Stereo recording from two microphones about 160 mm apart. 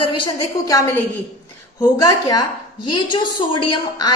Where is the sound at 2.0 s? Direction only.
25° left (ahead or behind).